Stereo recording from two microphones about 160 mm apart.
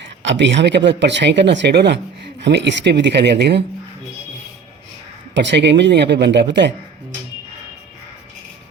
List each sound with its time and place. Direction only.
0.4 s speech: 90° right
5.3 s speech: 90° right